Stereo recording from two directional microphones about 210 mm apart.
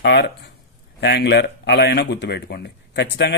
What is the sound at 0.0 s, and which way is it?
Speech, 55° left (ahead or behind).